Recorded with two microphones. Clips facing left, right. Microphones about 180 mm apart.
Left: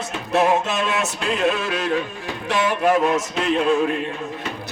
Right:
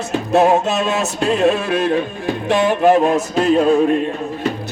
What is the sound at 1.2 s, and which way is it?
Speech, 35° right (ahead or behind).